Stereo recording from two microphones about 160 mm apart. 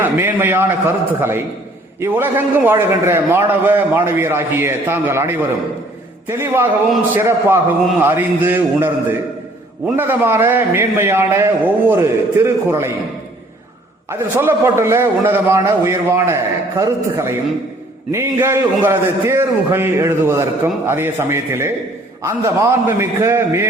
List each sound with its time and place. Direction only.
0.0 s a man's voice: 10° right (ahead or behind)
14.1 s a man's voice: 15° right (ahead or behind)